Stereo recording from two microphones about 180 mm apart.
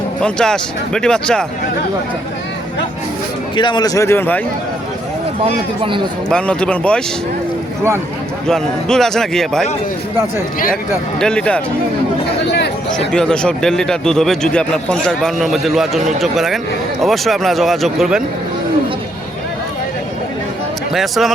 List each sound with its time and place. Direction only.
0.2 s speech: 5° left (ahead or behind)
3.5 s a man's voice: 25° left (ahead or behind)
6.2 s speech: 5° left (ahead or behind)
8.4 s speech: 5° left (ahead or behind)
11.2 s speech: 5° left (ahead or behind)
12.5 s a sound: 70° left (ahead or behind)
13.1 s speech: 5° left (ahead or behind)
20.9 s speech: centre (ahead or behind)